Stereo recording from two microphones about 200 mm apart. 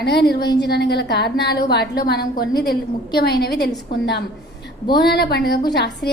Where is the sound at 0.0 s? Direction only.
55° left (ahead or behind).